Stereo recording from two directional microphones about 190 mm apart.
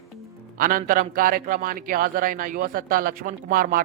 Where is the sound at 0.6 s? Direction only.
45° right (ahead or behind).